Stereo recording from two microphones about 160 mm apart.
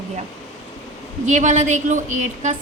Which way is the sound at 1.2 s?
50° right (ahead or behind).